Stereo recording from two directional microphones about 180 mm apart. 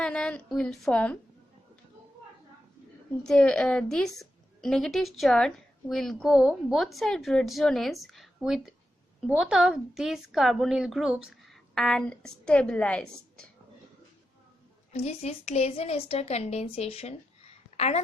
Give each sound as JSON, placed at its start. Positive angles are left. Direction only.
{"t": 0.0, "sound": "a woman's voice", "side_deg": 5}
{"t": 3.1, "sound": "a woman's voice", "side_deg": 5}
{"t": 14.9, "sound": "a woman's voice", "side_deg": 35}